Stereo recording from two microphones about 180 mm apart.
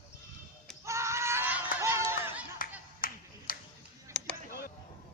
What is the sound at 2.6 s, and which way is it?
Finger snapping, 50° left (ahead or behind).